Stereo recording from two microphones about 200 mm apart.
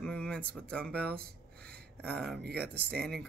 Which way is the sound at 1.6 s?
5° left (ahead or behind).